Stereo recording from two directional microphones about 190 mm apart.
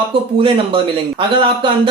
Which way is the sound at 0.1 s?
30° right (ahead or behind).